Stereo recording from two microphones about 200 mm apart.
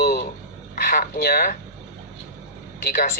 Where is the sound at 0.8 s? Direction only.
50° left (ahead or behind).